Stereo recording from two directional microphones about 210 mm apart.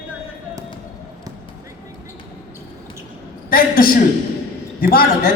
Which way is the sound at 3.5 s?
45° left (ahead or behind).